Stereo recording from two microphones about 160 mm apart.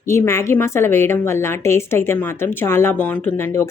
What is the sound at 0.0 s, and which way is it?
A woman's voice, 15° left (ahead or behind).